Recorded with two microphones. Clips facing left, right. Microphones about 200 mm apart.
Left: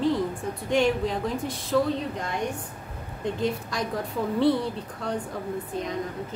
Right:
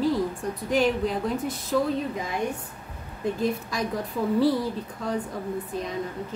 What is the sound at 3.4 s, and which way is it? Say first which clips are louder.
Speech: even; 5° right (ahead or behind).